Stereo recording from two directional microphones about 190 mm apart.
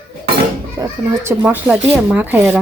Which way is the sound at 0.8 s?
15° right (ahead or behind).